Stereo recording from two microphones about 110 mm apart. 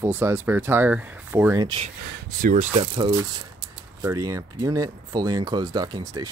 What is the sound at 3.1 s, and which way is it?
Speech, 35° right (ahead or behind).